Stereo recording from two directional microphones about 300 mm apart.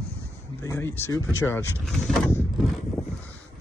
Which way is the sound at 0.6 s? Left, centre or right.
Centre.